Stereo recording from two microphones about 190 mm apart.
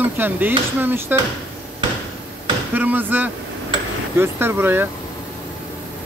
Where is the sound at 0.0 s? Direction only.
10° right (ahead or behind).